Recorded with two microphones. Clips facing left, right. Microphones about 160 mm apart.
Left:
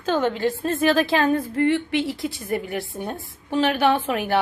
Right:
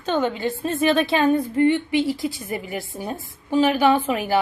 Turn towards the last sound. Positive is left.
turn(degrees=0)  # may be behind; listen again after turning